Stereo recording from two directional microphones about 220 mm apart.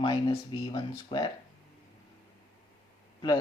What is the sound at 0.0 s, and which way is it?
Speech, 20° left (ahead or behind).